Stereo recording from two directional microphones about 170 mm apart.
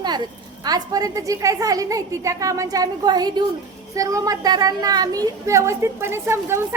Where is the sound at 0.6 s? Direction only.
20° right (ahead or behind).